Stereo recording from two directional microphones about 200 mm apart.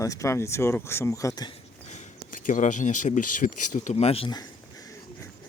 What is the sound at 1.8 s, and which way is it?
Speech, 35° left (ahead or behind).